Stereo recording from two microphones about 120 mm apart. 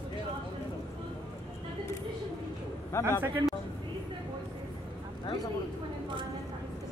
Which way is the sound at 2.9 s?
25° left (ahead or behind).